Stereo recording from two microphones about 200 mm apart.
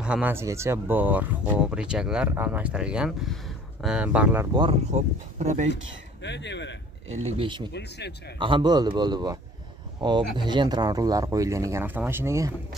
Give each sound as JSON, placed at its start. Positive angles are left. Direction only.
{"t": 0.0, "sound": "speech", "side_deg": -5}
{"t": 4.6, "sound": "speech", "side_deg": -30}
{"t": 6.2, "sound": "speech", "side_deg": 60}
{"t": 7.2, "sound": "a man's voice", "side_deg": -25}